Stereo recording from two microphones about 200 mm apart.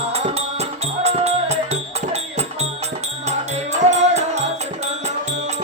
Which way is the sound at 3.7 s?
35° right (ahead or behind).